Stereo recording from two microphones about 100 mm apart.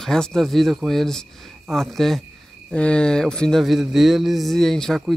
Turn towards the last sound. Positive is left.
turn(degrees=0)  # may be behind; listen again after turning